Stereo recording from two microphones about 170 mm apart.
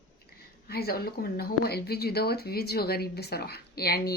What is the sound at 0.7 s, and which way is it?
Speech, 65° left (ahead or behind).